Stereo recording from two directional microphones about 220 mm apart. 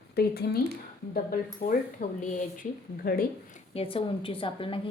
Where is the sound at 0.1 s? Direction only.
45° left (ahead or behind).